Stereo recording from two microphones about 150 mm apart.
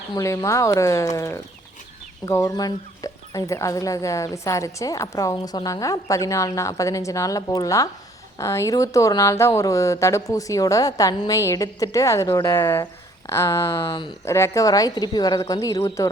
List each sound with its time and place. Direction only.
0.1 s speech: 20° left (ahead or behind)
14.3 s speech: 20° left (ahead or behind)